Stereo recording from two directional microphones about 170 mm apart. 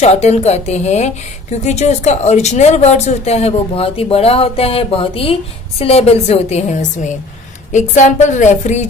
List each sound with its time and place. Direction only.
0.0 s a woman's voice: 40° left (ahead or behind)